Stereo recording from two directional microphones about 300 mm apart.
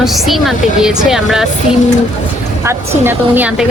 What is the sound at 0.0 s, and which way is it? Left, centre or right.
Speech, centre.